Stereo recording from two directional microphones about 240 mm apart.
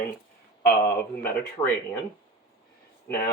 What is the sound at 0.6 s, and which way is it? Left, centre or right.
Speech, left.